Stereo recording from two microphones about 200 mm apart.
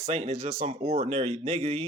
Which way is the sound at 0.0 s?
30° right (ahead or behind).